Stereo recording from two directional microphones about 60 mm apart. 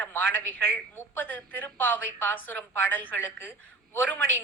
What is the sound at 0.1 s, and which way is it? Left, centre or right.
A woman's voice, left.